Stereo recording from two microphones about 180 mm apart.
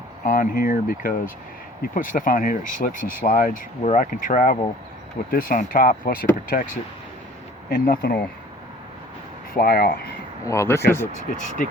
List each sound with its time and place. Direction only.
0.3 s speech: 50° left (ahead or behind)
7.7 s speech: 60° left (ahead or behind)
9.6 s speech: 55° left (ahead or behind)
10.4 s speech: 15° left (ahead or behind)
11.3 s speech: 45° left (ahead or behind)